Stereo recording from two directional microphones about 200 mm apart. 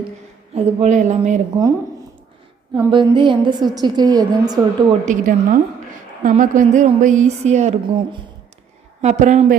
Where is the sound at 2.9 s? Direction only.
25° right (ahead or behind).